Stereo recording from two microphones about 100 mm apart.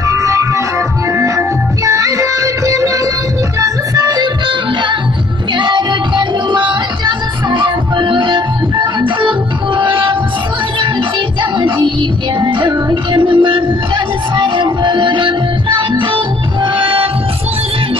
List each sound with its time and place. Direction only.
0.1 s music: 30° right (ahead or behind)
5.6 s music: 50° right (ahead or behind)
12.4 s music: 50° right (ahead or behind)